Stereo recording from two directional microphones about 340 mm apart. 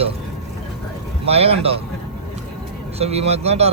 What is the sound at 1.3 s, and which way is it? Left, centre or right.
Speech, centre.